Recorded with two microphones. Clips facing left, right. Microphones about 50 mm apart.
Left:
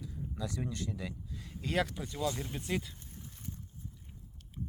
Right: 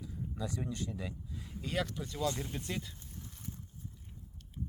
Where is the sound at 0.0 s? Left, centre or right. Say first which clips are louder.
Even; right.